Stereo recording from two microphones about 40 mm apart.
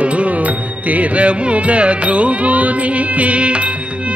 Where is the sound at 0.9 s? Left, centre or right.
Right.